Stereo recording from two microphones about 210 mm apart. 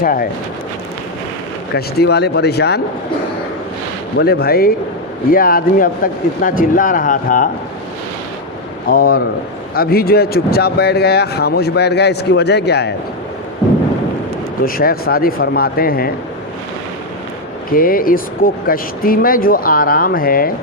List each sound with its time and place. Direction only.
0.0 s speech: 45° left (ahead or behind)
1.7 s speech: 50° left (ahead or behind)
4.2 s speech: 45° left (ahead or behind)
8.9 s speech: 45° left (ahead or behind)
14.6 s speech: 45° left (ahead or behind)
17.7 s speech: 45° left (ahead or behind)